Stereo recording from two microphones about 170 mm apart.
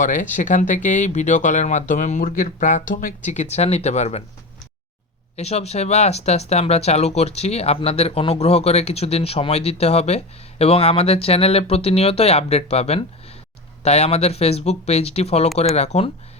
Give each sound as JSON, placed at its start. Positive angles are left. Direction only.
{"t": 0.0, "sound": "speech", "side_deg": 50}
{"t": 5.4, "sound": "speech", "side_deg": 40}